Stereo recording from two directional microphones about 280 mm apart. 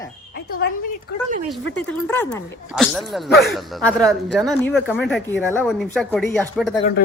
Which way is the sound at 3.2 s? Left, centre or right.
Left.